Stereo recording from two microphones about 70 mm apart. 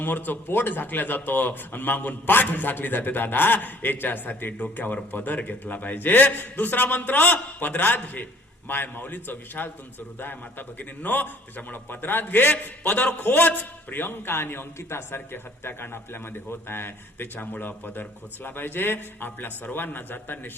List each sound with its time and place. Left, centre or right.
0.0 s a man's voice: left